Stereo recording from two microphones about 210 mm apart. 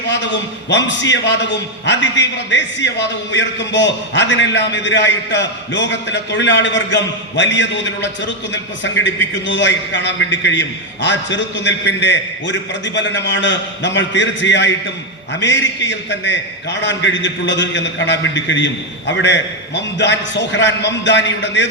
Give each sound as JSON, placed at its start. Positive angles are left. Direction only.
{"t": 0.2, "sound": "a man's voice", "side_deg": 60}